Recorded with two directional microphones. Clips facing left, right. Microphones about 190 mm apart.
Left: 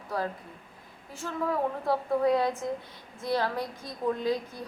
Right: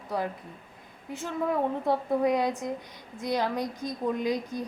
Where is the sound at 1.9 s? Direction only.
20° right (ahead or behind).